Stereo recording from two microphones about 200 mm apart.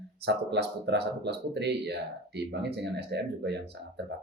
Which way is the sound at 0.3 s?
60° right (ahead or behind).